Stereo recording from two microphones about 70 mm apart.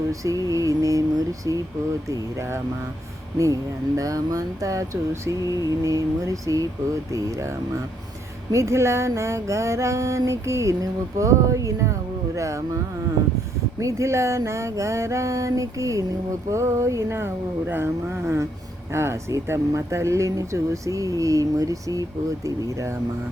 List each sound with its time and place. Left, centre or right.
0.1 s speech: right
3.3 s speech: right
8.5 s speech: right
13.7 s speech: right